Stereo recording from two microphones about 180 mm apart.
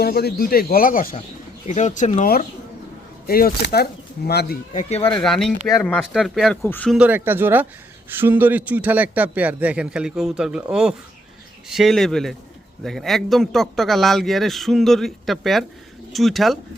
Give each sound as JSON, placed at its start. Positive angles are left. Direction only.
{"t": 0.0, "sound": "speech", "side_deg": 60}
{"t": 1.6, "sound": "speech", "side_deg": 40}
{"t": 3.2, "sound": "speech", "side_deg": 55}
{"t": 4.7, "sound": "speech", "side_deg": 40}
{"t": 5.0, "sound": "a man's voice", "side_deg": 5}
{"t": 6.9, "sound": "a man's voice", "side_deg": -10}